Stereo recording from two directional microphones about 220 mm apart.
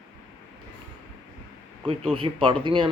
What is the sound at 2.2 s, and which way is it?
Speech, 25° right (ahead or behind).